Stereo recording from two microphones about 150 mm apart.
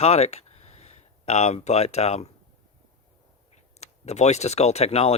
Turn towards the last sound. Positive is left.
turn(degrees=45)  # may be behind; listen again after turning